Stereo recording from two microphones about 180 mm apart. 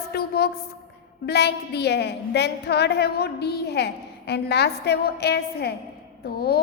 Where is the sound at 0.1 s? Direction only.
60° left (ahead or behind).